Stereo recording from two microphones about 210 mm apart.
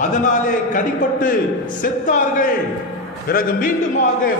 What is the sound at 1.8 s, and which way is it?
A man's voice, 40° left (ahead or behind).